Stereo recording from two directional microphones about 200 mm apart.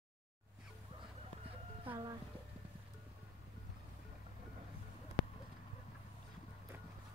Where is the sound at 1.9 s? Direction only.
20° right (ahead or behind).